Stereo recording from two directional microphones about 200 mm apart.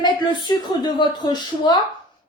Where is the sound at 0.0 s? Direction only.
20° left (ahead or behind).